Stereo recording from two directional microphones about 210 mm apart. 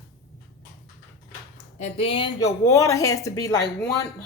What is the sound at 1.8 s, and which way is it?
Speech, 25° left (ahead or behind).